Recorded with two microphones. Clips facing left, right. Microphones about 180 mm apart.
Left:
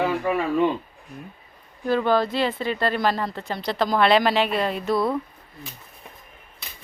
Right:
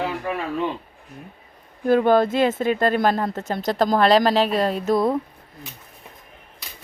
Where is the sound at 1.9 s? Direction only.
50° right (ahead or behind).